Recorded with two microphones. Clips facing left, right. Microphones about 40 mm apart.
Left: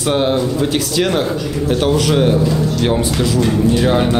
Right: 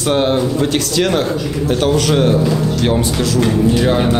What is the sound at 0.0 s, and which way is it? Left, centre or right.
Speech, centre.